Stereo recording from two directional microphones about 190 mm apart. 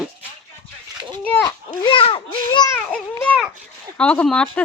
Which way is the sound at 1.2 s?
10° left (ahead or behind).